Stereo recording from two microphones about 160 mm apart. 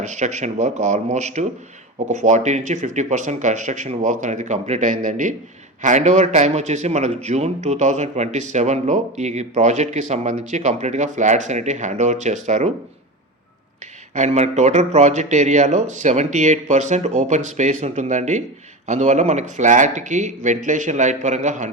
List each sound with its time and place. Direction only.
0.0 s speech: 50° right (ahead or behind)
14.1 s speech: 45° right (ahead or behind)